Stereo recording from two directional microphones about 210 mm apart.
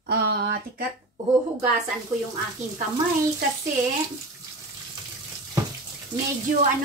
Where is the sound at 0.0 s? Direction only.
50° right (ahead or behind).